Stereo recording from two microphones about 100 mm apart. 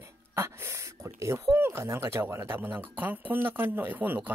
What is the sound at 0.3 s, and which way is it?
Speech, 25° right (ahead or behind).